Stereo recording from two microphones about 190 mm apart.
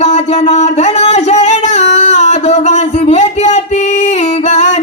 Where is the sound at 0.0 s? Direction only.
35° left (ahead or behind).